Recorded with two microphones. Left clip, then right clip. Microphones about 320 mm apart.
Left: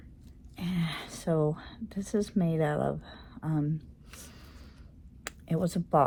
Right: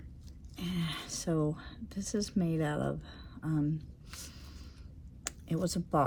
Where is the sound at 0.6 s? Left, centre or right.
Centre.